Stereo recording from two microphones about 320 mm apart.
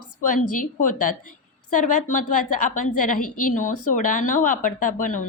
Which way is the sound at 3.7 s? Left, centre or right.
Left.